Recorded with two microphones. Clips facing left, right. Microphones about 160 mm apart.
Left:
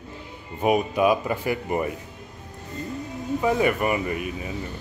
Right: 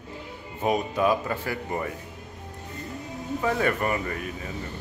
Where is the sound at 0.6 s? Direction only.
15° left (ahead or behind).